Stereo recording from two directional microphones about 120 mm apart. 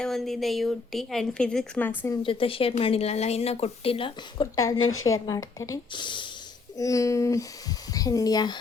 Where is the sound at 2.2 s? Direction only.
50° left (ahead or behind); by 5.8 s 30° left (ahead or behind).